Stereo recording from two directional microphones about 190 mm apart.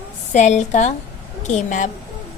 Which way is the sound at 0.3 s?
40° left (ahead or behind).